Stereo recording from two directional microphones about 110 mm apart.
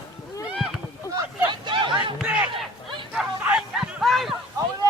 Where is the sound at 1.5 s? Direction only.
50° right (ahead or behind).